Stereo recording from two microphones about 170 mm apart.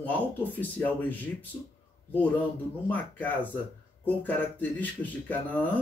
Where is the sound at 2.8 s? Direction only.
10° left (ahead or behind).